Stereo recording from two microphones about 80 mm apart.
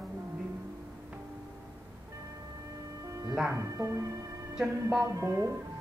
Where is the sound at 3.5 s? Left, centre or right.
Right.